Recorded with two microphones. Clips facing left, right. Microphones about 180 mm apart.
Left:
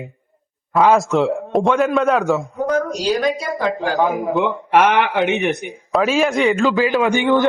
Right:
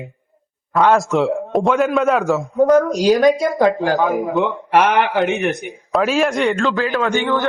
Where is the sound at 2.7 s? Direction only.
50° right (ahead or behind).